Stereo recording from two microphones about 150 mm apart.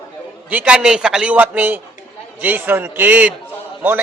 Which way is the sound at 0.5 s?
5° right (ahead or behind).